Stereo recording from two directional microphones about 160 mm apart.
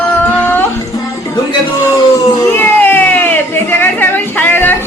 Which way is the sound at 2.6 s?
10° left (ahead or behind).